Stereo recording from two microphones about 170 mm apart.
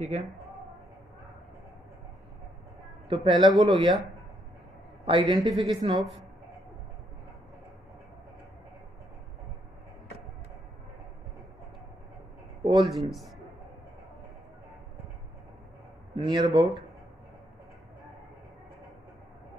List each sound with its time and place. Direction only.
3.1 s speech: 30° right (ahead or behind)
5.0 s a woman's voice: 30° right (ahead or behind)
12.6 s speech: 25° right (ahead or behind)
16.2 s speech: 25° right (ahead or behind)